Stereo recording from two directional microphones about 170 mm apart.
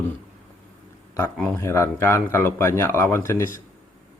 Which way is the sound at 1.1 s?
15° left (ahead or behind).